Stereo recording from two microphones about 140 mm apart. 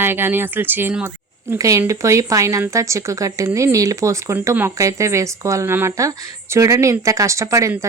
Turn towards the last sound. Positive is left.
turn(degrees=-20)  # may be behind; listen again after turning